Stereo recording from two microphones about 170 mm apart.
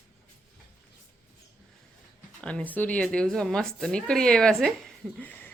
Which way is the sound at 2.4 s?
5° left (ahead or behind).